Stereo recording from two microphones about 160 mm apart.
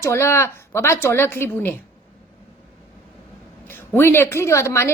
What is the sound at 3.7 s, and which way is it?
A woman's voice, 15° left (ahead or behind).